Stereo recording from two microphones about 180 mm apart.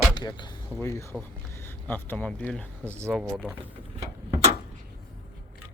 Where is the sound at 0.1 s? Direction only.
25° left (ahead or behind).